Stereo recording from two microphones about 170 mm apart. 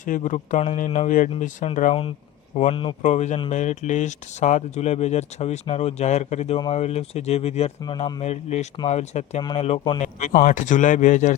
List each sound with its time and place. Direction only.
0.0 s speech: 50° left (ahead or behind); by 8.1 s 30° left (ahead or behind)
8.2 s speech: 40° left (ahead or behind)